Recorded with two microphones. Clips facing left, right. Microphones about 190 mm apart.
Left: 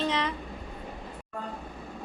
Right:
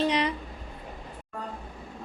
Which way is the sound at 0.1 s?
15° right (ahead or behind).